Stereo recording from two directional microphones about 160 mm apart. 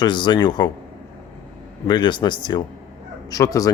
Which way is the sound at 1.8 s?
30° left (ahead or behind).